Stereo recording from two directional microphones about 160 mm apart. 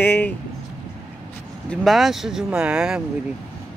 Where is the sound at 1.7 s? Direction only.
Centre (ahead or behind).